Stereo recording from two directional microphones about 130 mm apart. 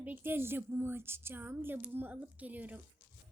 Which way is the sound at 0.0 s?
15° right (ahead or behind).